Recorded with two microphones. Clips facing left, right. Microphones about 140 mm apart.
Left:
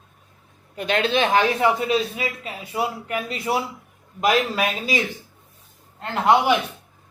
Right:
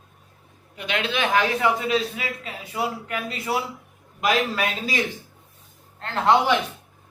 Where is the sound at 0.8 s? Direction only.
40° left (ahead or behind).